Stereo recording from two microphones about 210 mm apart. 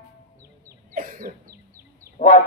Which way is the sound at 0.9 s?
40° right (ahead or behind).